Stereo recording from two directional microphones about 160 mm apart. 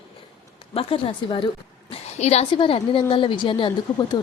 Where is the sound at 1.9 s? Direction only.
40° left (ahead or behind).